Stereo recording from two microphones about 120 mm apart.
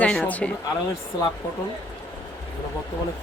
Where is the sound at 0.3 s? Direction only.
10° left (ahead or behind).